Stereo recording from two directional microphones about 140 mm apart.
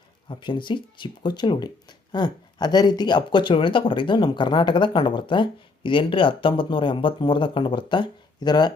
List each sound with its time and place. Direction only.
0.3 s speech: 35° left (ahead or behind)